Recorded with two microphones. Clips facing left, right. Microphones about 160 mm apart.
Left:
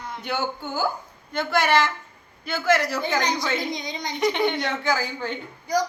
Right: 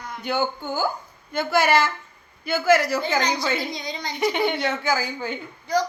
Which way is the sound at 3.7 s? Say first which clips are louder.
Left 1 dB; 20° left (ahead or behind).